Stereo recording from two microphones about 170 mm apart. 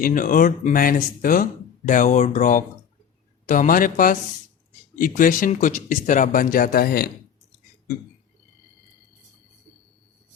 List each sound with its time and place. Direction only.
0.0 s speech: 55° left (ahead or behind)